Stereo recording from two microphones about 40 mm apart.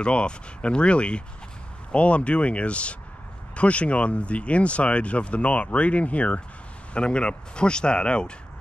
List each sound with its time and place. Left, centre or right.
0.0 s speech: left
6.9 s speech: left